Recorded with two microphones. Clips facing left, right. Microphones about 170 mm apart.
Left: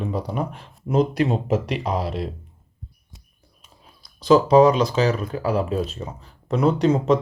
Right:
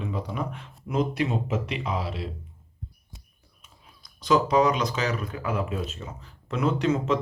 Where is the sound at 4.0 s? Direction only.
30° left (ahead or behind).